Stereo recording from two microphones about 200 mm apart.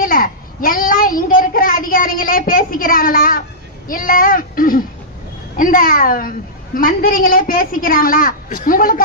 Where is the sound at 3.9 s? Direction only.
45° left (ahead or behind).